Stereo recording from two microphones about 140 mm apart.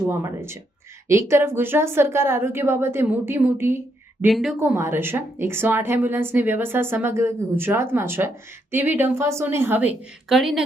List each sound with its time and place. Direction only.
0.1 s a woman's voice: 20° right (ahead or behind)
4.3 s speech: centre (ahead or behind)
4.6 s a woman's voice: 15° right (ahead or behind)
10.2 s speech: centre (ahead or behind)